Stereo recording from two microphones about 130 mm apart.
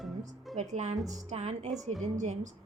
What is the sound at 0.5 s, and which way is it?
A woman's voice, 60° right (ahead or behind).